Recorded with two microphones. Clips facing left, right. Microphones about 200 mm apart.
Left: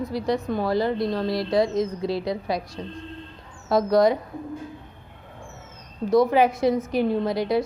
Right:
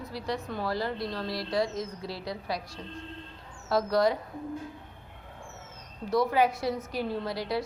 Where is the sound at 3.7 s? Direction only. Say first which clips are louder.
Left 6 dB; 20° left (ahead or behind).